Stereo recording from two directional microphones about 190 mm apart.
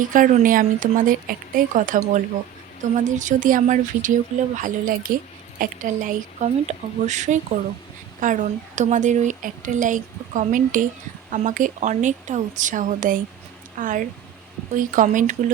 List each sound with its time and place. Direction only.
0.0 s speech: 45° right (ahead or behind)